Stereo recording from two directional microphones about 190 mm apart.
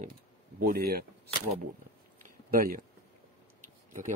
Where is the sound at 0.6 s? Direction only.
55° right (ahead or behind).